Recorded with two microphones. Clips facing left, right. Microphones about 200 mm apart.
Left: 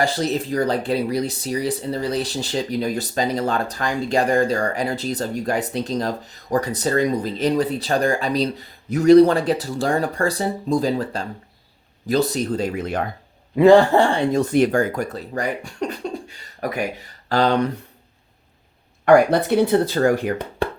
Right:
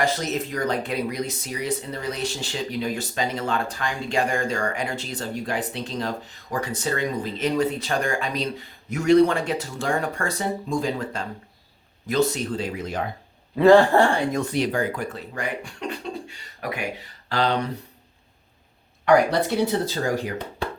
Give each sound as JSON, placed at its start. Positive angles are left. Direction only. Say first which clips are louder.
{"t": 0.0, "sound": "speech", "louder": "left 3 dB", "side_deg": 30}
{"t": 13.6, "sound": "a man's voice", "louder": "left 2 dB", "side_deg": 15}
{"t": 14.5, "sound": "speech", "louder": "left 6 dB", "side_deg": 50}
{"t": 19.0, "sound": "speech", "louder": "left 4 dB", "side_deg": 55}